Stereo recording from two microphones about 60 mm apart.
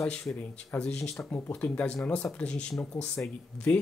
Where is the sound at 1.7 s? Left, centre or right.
Left.